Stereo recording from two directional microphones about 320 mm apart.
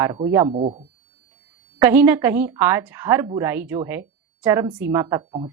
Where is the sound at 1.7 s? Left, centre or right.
Centre.